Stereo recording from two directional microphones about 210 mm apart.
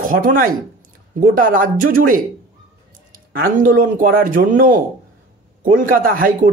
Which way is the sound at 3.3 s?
40° right (ahead or behind).